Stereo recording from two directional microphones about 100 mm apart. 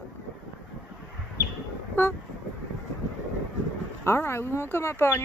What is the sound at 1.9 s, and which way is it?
Vehicle, 25° left (ahead or behind).